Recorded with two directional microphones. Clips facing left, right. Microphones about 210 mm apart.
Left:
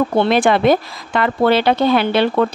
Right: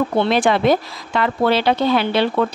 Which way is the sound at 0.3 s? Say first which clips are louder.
Left 2 dB; 55° left (ahead or behind).